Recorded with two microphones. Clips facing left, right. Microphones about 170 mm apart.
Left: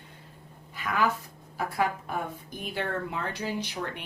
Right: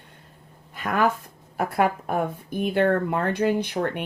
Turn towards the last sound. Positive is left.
turn(degrees=-55)  # may be behind; listen again after turning